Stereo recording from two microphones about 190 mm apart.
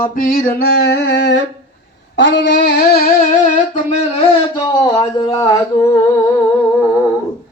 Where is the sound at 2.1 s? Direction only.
75° left (ahead or behind).